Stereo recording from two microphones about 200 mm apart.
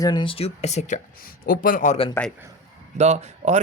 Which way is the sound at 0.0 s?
25° left (ahead or behind).